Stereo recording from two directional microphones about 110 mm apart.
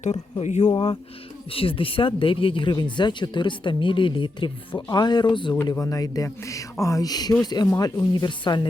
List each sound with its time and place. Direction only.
0.0 s speech: 90° left
0.7 s speech: 50° left (ahead or behind)
5.8 s speech: 35° left (ahead or behind)